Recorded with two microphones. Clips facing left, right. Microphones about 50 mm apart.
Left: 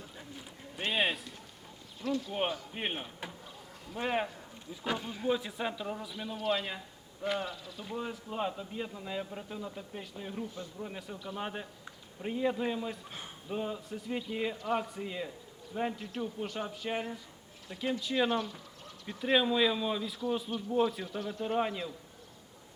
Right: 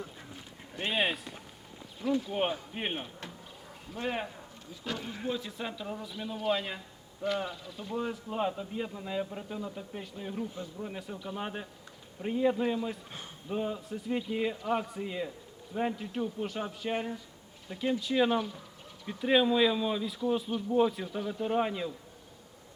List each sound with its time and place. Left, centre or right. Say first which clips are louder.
0.8 s speech: right 1 dB; centre
2.2 s a man's voice: right 2 dB; centre
3.9 s a man's voice: left 2 dB; centre